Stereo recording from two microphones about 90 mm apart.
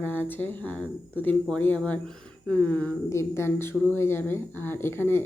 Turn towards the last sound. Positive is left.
turn(degrees=25)  # may be behind; listen again after turning